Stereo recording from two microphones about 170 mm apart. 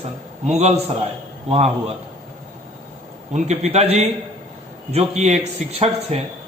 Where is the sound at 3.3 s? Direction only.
40° right (ahead or behind).